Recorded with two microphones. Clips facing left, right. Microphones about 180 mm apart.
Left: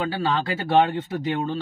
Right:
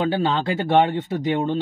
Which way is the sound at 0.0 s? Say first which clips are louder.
Right 3 dB; 25° right (ahead or behind).